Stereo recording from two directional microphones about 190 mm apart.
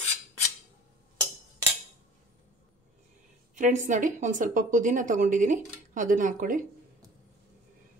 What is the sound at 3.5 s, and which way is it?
A woman's voice, 40° right (ahead or behind).